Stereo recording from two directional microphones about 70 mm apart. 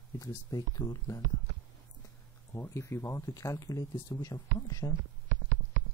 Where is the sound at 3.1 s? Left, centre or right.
Left.